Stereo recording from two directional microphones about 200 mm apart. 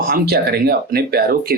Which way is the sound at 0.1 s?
50° right (ahead or behind).